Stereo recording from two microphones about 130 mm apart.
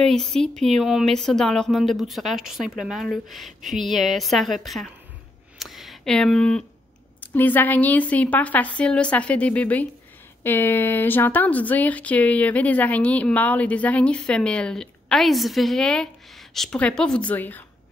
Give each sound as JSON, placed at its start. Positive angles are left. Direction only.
{"t": 0.0, "sound": "speech", "side_deg": 5}
{"t": 5.6, "sound": "a sound", "side_deg": 0}
{"t": 7.2, "sound": "speech", "side_deg": 15}